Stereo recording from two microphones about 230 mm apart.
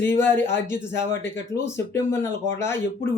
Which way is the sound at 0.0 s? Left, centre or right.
Centre.